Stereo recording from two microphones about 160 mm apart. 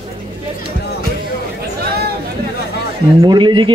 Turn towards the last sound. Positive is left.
turn(degrees=-30)  # may be behind; listen again after turning